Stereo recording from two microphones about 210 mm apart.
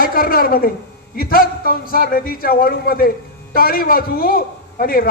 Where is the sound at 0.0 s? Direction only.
45° left (ahead or behind).